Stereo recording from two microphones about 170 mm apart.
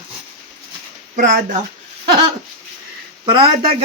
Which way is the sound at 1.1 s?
50° right (ahead or behind).